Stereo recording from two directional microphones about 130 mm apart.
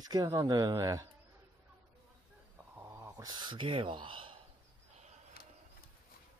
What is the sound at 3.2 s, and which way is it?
Speech, 35° right (ahead or behind).